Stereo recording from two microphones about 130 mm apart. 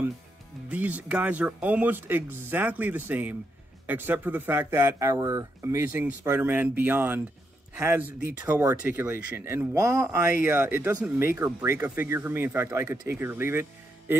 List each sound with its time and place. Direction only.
0.7 s speech: 10° right (ahead or behind)
8.4 s speech: 15° right (ahead or behind)